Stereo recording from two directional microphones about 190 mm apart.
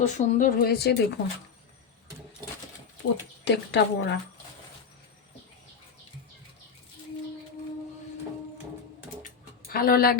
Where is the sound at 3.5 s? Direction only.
65° left (ahead or behind).